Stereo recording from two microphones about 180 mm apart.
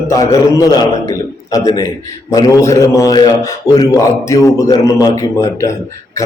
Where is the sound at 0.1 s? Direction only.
20° left (ahead or behind).